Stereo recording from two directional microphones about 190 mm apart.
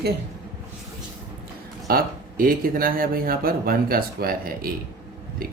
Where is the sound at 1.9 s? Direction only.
50° right (ahead or behind).